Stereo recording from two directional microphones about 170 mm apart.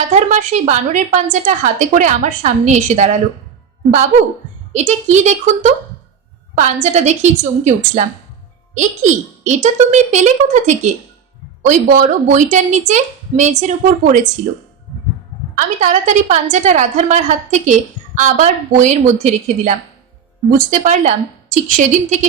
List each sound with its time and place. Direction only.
0.1 s a woman's voice: 45° right (ahead or behind)
4.7 s a woman's voice: 40° right (ahead or behind)
15.5 s a woman's voice: 45° right (ahead or behind)